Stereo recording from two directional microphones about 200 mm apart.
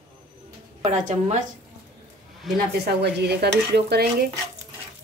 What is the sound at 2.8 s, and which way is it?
Stir, 55° right (ahead or behind).